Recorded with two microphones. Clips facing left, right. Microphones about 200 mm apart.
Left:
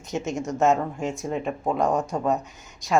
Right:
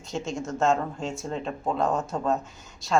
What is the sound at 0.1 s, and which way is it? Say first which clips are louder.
Speech: left 3 dB; 20° left (ahead or behind).